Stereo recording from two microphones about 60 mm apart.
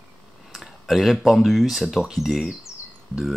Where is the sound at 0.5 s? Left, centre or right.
Centre.